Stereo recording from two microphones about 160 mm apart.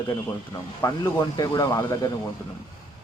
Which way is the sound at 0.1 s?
15° left (ahead or behind).